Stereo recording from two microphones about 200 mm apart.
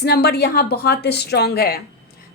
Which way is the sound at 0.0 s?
50° left (ahead or behind).